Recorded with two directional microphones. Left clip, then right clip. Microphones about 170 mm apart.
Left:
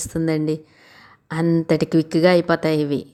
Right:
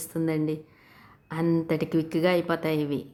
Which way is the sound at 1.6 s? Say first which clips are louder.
Left 8 dB; 30° left (ahead or behind).